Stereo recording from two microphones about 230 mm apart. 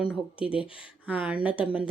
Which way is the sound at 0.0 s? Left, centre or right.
Centre.